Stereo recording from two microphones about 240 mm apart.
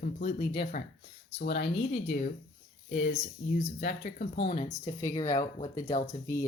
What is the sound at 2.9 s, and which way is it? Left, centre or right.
Speech, left.